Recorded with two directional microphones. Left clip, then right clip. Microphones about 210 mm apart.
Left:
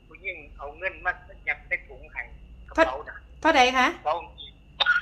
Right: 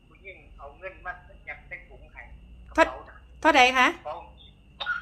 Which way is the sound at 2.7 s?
10° right (ahead or behind).